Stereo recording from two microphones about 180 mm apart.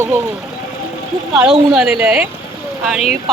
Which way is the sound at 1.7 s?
5° right (ahead or behind).